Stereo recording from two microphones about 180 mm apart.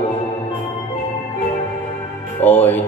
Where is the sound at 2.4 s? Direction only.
10° left (ahead or behind).